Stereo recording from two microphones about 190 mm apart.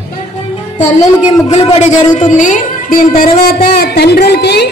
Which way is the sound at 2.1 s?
40° left (ahead or behind).